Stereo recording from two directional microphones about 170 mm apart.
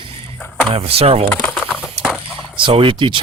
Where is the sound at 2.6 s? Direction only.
30° right (ahead or behind).